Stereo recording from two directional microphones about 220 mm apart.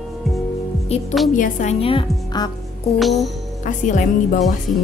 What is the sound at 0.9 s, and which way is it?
A woman's voice, 30° left (ahead or behind).